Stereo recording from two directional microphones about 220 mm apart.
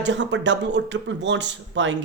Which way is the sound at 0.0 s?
55° right (ahead or behind).